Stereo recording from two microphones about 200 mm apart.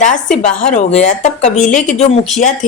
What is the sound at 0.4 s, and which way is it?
A woman's voice, 40° left (ahead or behind).